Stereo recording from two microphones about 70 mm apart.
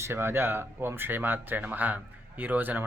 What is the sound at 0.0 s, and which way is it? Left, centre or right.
Speech, right.